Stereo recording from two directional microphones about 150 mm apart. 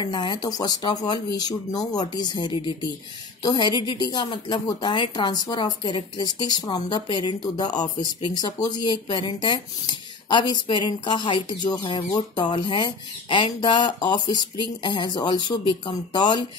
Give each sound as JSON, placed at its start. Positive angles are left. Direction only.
{"t": 0.0, "sound": "a woman's voice", "side_deg": 30}